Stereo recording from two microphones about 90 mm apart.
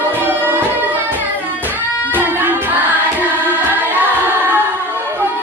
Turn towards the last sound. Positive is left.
turn(degrees=-20)  # may be behind; listen again after turning